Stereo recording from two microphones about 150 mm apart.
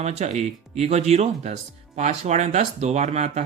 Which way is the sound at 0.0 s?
45° right (ahead or behind).